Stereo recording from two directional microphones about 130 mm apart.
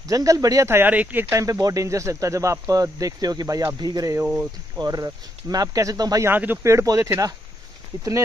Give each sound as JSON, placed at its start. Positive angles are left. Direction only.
{"t": 0.1, "sound": "speech", "side_deg": -25}
{"t": 6.3, "sound": "speech", "side_deg": -15}